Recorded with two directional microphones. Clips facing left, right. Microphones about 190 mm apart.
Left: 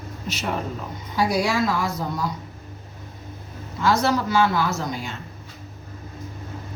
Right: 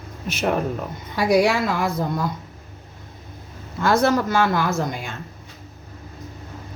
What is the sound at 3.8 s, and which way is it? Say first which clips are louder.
A woman's voice: right 3 dB; 55° right (ahead or behind).